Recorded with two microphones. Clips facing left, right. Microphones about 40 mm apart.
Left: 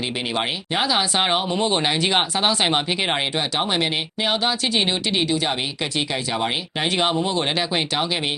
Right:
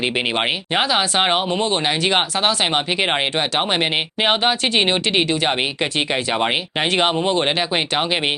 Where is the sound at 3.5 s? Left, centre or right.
Right.